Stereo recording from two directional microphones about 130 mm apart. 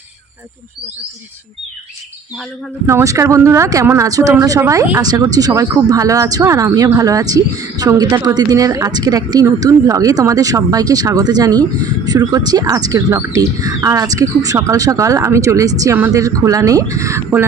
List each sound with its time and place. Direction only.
2.8 s speech: 25° right (ahead or behind)